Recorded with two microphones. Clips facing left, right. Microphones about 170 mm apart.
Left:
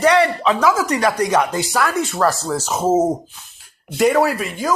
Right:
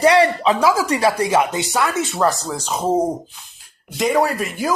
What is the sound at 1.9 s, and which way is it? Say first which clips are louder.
Speech: left 1 dB; centre (ahead or behind).